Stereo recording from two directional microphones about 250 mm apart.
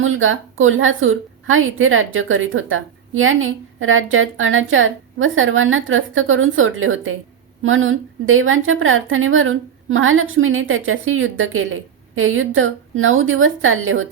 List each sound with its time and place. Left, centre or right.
0.0 s a woman's voice: right